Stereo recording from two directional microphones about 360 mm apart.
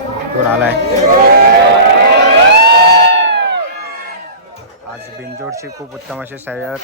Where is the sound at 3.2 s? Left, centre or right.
Right.